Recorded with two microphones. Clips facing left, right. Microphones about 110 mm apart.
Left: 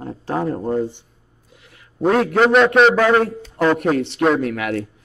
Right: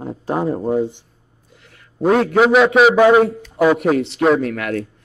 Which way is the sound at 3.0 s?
15° right (ahead or behind).